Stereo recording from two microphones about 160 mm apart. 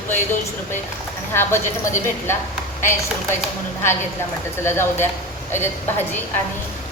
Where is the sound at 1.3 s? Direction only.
15° left (ahead or behind).